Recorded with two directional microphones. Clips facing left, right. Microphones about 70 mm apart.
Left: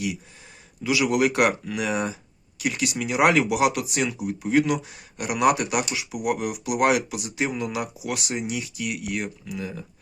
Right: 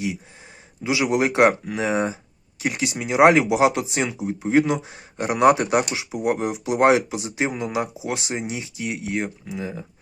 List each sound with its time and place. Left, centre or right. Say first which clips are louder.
0.9 s speech: right 1 dB; right